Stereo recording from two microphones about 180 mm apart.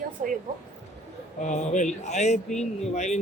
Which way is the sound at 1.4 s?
40° left (ahead or behind).